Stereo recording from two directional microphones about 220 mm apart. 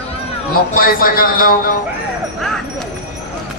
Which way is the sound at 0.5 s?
40° left (ahead or behind).